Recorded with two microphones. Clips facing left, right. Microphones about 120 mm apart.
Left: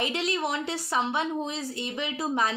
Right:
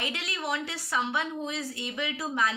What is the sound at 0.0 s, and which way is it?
A woman's voice, 25° left (ahead or behind).